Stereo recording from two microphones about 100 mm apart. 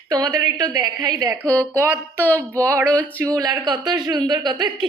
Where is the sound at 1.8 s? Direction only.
20° right (ahead or behind).